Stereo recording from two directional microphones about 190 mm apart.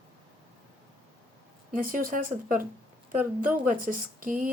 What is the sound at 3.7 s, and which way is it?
Speech, 45° right (ahead or behind).